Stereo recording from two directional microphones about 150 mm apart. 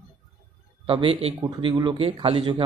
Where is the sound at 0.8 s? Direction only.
35° right (ahead or behind).